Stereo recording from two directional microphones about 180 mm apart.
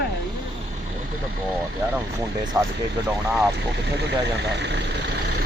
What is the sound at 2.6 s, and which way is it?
Speech, 20° right (ahead or behind).